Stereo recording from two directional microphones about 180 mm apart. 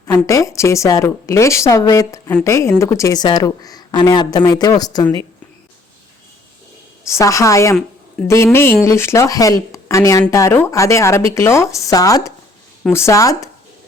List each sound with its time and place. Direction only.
0.0 s a woman's voice: 20° left (ahead or behind)
7.1 s speech: 15° left (ahead or behind)